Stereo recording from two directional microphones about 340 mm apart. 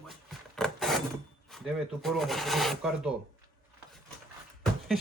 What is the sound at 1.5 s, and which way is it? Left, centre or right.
Speech, centre.